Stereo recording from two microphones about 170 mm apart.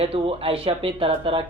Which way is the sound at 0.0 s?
35° right (ahead or behind).